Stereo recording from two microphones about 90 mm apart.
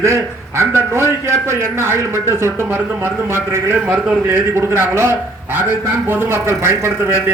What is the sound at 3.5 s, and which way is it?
A man's voice, 20° right (ahead or behind).